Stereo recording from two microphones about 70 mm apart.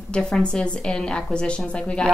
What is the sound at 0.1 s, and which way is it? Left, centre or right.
A woman's voice, centre.